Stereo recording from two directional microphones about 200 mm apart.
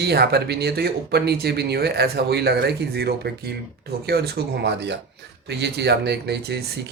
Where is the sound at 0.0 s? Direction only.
55° right (ahead or behind).